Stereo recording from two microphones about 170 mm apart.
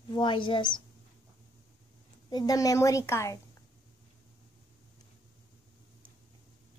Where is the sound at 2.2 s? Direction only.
25° left (ahead or behind).